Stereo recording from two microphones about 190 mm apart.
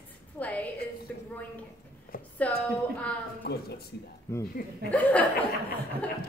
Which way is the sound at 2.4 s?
5° left (ahead or behind).